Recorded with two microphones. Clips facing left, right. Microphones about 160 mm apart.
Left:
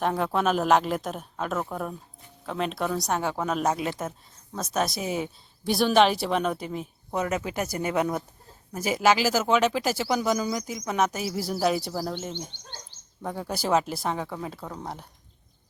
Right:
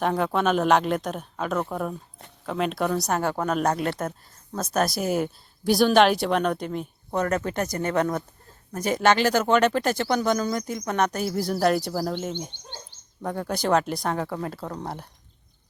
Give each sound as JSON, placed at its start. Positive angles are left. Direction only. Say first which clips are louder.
{"t": 0.0, "sound": "speech", "louder": "right 2 dB", "side_deg": 0}
{"t": 12.5, "sound": "bird", "louder": "right 3 dB", "side_deg": -15}
{"t": 13.2, "sound": "speech", "louder": "right 3 dB", "side_deg": 5}